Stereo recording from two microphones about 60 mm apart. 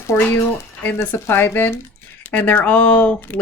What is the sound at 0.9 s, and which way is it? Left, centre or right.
Speech, left.